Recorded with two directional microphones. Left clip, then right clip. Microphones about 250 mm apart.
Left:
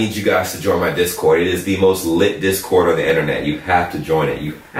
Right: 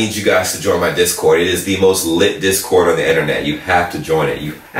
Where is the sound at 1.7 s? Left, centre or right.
Left.